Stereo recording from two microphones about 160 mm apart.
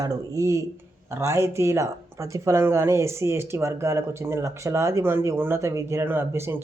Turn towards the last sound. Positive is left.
turn(degrees=-15)  # may be behind; listen again after turning